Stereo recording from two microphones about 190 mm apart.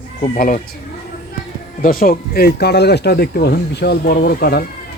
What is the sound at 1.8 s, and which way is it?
Speech, 50° left (ahead or behind).